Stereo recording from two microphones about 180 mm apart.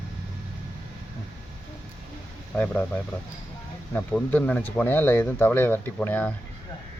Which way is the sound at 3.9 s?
10° left (ahead or behind).